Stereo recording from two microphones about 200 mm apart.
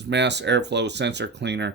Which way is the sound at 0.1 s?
60° right (ahead or behind).